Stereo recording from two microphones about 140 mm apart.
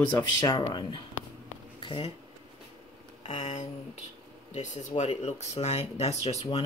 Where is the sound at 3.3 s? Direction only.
55° left (ahead or behind).